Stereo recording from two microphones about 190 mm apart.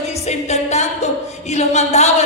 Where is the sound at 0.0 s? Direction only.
35° left (ahead or behind).